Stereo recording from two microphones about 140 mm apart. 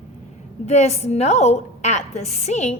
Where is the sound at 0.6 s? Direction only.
50° left (ahead or behind).